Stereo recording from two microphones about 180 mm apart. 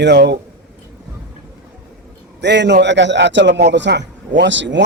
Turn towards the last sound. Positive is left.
turn(degrees=-90)